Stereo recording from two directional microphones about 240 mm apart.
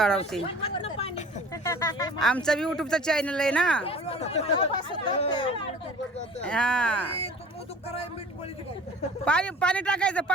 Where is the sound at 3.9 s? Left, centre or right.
Left.